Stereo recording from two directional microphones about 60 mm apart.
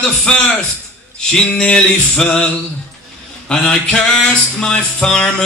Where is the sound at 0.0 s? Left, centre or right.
Centre.